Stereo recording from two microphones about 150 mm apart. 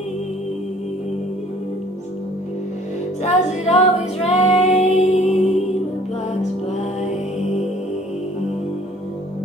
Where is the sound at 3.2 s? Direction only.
50° left (ahead or behind).